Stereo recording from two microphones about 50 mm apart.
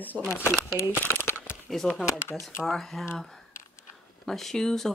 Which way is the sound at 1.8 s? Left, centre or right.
Centre.